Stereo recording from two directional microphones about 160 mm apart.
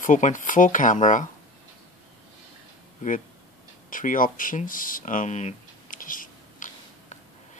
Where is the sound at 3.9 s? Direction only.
55° left (ahead or behind).